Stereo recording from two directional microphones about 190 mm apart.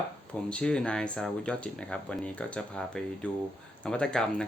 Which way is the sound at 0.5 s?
5° left (ahead or behind).